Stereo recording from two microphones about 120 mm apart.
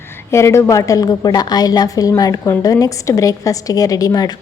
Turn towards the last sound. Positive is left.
turn(degrees=30)  # may be behind; listen again after turning